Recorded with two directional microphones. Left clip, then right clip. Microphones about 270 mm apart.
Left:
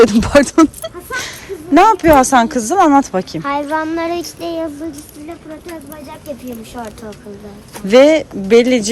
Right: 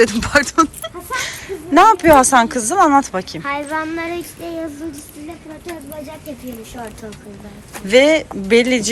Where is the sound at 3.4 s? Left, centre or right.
Left.